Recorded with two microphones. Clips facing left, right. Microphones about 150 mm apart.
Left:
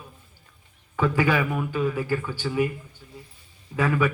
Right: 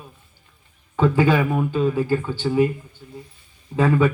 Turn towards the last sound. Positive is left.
turn(degrees=-25)  # may be behind; listen again after turning